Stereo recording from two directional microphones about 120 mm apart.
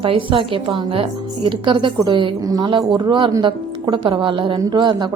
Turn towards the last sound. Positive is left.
turn(degrees=-40)  # may be behind; listen again after turning